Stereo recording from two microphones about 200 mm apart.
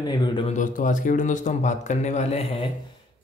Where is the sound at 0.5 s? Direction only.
40° left (ahead or behind).